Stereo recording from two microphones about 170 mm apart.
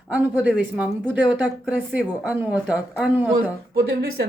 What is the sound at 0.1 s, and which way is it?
Speech, 10° right (ahead or behind).